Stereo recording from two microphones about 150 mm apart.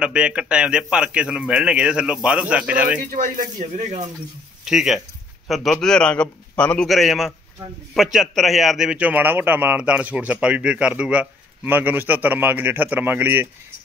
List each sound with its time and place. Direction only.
0.0 s a man's voice: 5° right (ahead or behind)
3.1 s speech: 60° right (ahead or behind)
4.6 s a man's voice: 5° right (ahead or behind)